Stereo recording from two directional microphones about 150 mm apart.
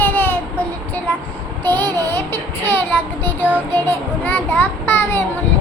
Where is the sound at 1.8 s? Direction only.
25° right (ahead or behind).